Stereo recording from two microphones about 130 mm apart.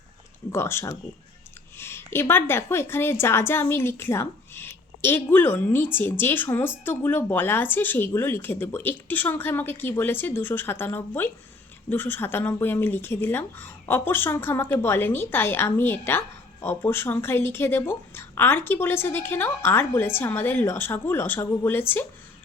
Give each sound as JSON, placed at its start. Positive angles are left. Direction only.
{"t": 0.5, "sound": "a woman's voice", "side_deg": 20}